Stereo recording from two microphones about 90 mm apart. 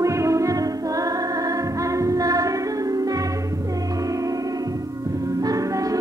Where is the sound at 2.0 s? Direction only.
40° right (ahead or behind).